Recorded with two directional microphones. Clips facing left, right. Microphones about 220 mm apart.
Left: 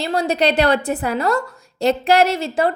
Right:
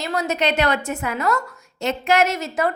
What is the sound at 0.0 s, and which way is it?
A woman's voice, 30° left (ahead or behind).